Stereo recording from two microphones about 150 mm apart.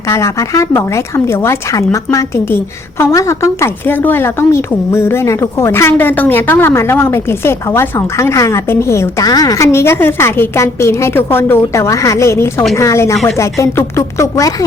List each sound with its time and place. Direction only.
0.1 s speech: 20° left (ahead or behind)